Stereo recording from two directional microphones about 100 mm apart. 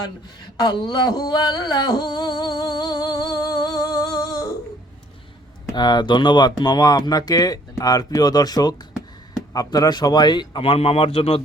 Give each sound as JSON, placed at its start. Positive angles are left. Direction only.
{"t": 0.6, "sound": "a sound", "side_deg": 45}
{"t": 5.7, "sound": "speech", "side_deg": 45}
{"t": 10.6, "sound": "a man's voice", "side_deg": 80}